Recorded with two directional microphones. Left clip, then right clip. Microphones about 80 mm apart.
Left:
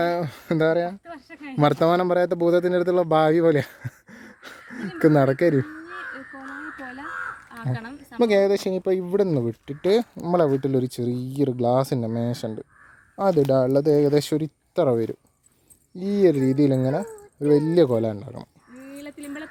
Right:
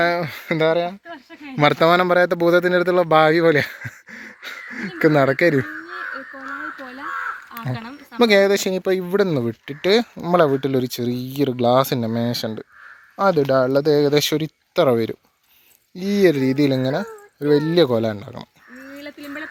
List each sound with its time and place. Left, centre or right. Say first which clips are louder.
0.0 s a sound: right 4 dB; left
0.3 s speech: right 6 dB; left
1.7 s a man's voice: right 6 dB; left
2.0 s a man's voice: right 4 dB; left
4.1 s a sound: right 8 dB; left
7.5 s a woman's voice: right 3 dB; left
9.8 s a man's voice: right 3 dB; left
13.1 s speech: right 3 dB; left
13.7 s speech: right 3 dB; left
14.3 s speech: right 4 dB; centre
16.0 s a man's voice: right 3 dB; left
18.9 s a sound: right 4 dB; left